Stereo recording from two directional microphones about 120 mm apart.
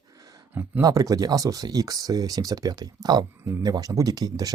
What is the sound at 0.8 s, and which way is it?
Speech, 30° right (ahead or behind).